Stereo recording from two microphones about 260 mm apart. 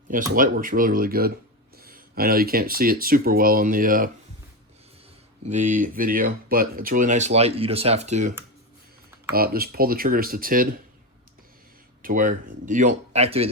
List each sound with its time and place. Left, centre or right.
0.1 s speech: right
5.5 s speech: right
9.3 s speech: right
12.0 s speech: right